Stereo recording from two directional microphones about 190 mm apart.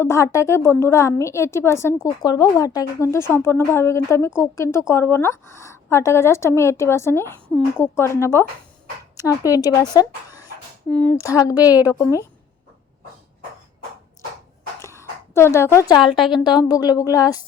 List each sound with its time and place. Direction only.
0.0 s a woman's voice: 15° left (ahead or behind)
14.8 s a sound: 15° left (ahead or behind)
16.3 s speech: 25° left (ahead or behind)